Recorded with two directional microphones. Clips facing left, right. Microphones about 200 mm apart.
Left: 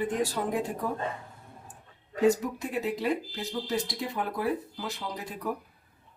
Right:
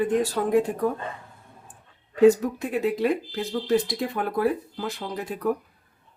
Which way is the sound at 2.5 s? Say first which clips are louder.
Right 6 dB; 55° right (ahead or behind).